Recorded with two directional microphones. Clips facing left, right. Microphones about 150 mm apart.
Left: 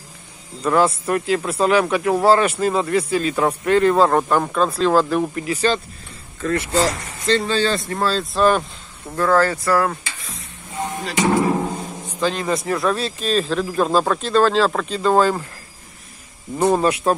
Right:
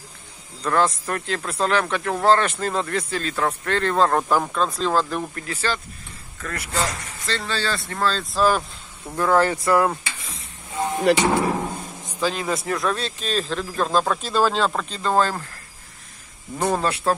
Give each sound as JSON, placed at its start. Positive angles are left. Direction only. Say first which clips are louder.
{"t": 0.6, "sound": "speech", "louder": "left 4 dB", "side_deg": 10}
{"t": 6.4, "sound": "speech", "louder": "left 8 dB", "side_deg": 30}
{"t": 8.2, "sound": "speech", "louder": "left 4 dB", "side_deg": 0}
{"t": 9.1, "sound": "speech", "louder": "left 2 dB", "side_deg": -15}
{"t": 11.1, "sound": "speech", "louder": "right 5 dB", "side_deg": -60}
{"t": 12.1, "sound": "speech", "louder": "left 3 dB", "side_deg": -5}
{"t": 16.5, "sound": "speech", "louder": "left 5 dB", "side_deg": 15}